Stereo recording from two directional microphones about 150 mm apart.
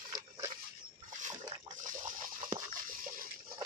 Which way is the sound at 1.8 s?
60° right (ahead or behind).